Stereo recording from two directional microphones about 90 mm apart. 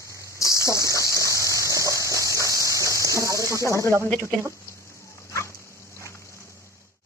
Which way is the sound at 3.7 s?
35° left (ahead or behind).